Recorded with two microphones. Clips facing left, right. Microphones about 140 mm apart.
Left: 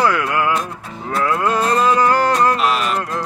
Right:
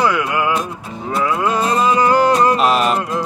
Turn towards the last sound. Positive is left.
turn(degrees=-10)  # may be behind; listen again after turning